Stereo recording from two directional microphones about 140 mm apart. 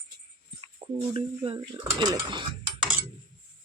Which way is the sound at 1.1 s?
40° right (ahead or behind).